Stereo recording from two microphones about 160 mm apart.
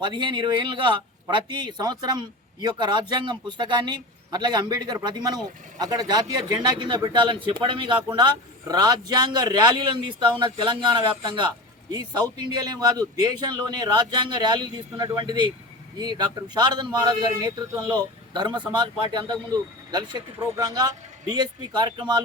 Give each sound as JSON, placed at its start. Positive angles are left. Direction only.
{"t": 0.0, "sound": "a man's voice", "side_deg": -30}